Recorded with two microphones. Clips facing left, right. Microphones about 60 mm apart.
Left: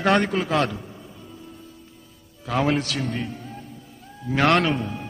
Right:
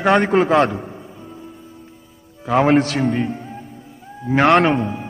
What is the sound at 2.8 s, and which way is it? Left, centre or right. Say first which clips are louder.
Speech: right 9 dB; right.